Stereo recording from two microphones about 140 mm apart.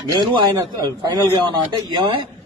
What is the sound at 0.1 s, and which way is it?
A man's voice, 25° right (ahead or behind).